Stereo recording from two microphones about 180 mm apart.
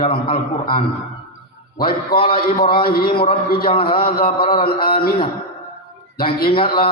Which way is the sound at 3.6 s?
30° left (ahead or behind).